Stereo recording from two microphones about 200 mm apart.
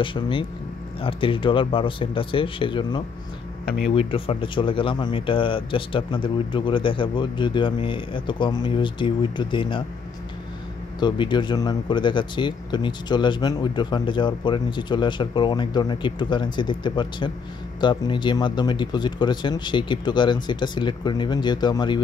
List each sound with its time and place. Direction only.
0.0 s speech: 25° left (ahead or behind)
11.0 s speech: 20° left (ahead or behind)